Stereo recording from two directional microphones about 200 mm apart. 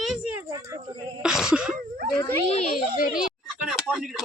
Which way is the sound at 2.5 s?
40° left (ahead or behind).